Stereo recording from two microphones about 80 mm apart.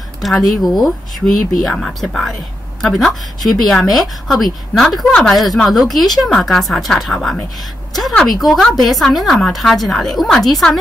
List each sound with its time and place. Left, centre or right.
0.2 s a woman's voice: centre